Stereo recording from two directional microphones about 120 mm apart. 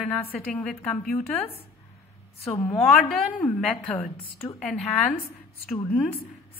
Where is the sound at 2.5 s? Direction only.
15° left (ahead or behind).